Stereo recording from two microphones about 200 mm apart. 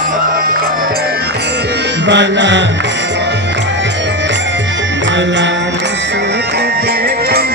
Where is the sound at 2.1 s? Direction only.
65° right (ahead or behind).